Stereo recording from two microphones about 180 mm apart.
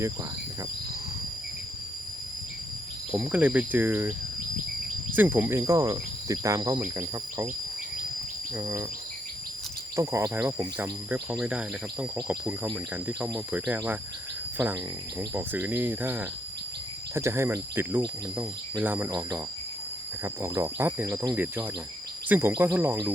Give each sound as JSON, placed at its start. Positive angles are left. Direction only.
{"t": 3.1, "sound": "cricket", "side_deg": -5}
{"t": 5.1, "sound": "cricket", "side_deg": -10}
{"t": 8.5, "sound": "cricket", "side_deg": -15}
{"t": 9.9, "sound": "cricket", "side_deg": -15}
{"t": 15.3, "sound": "cricket", "side_deg": -10}
{"t": 20.2, "sound": "cricket", "side_deg": -15}